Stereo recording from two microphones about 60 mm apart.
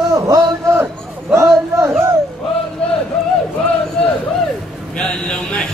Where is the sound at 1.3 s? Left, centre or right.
Right.